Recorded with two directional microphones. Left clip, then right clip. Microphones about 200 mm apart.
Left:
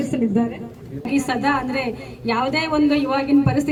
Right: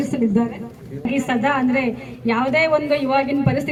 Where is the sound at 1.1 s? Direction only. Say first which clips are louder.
Even; 50° left (ahead or behind).